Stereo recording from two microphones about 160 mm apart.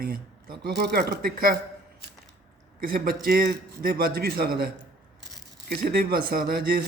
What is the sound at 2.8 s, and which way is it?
A man's voice, 70° right (ahead or behind).